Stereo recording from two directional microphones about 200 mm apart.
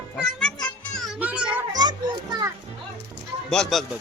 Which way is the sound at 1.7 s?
20° right (ahead or behind).